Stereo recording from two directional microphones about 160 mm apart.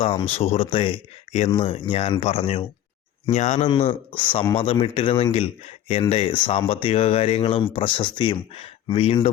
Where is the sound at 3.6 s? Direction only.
35° left (ahead or behind).